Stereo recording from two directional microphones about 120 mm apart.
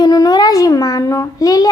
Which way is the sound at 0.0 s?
30° left (ahead or behind).